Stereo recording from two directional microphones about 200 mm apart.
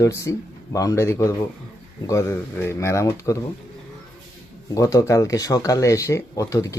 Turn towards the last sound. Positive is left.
turn(degrees=15)  # may be behind; listen again after turning